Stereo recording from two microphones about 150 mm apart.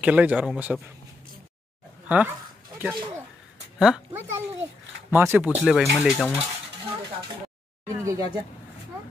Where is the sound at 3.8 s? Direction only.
5° right (ahead or behind).